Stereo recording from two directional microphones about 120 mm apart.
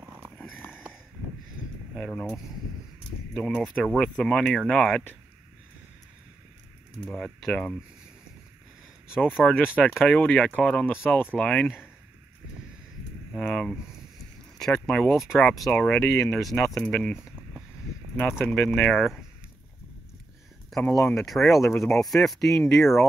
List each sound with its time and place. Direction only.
2.0 s speech: 10° left (ahead or behind)
3.4 s speech: 5° left (ahead or behind)
7.1 s speech: 5° left (ahead or behind)
9.5 s speech: 10° left (ahead or behind)
10.9 s speech: 20° left (ahead or behind)
11.3 s speech: 5° left (ahead or behind)
13.3 s speech: 10° left (ahead or behind)
18.4 s speech: 10° left (ahead or behind)
20.7 s a sound: centre (ahead or behind)
21.1 s speech: 5° left (ahead or behind)